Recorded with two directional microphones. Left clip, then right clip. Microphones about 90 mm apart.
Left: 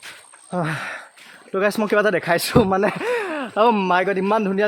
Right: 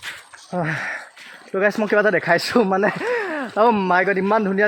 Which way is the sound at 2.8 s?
20° left (ahead or behind).